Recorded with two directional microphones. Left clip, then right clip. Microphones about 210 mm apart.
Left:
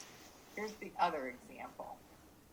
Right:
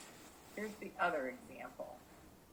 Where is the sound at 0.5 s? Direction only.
40° left (ahead or behind).